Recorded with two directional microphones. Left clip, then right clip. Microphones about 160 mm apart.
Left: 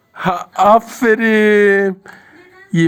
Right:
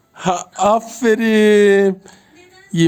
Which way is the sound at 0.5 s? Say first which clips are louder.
Left 7 dB; 15° left (ahead or behind).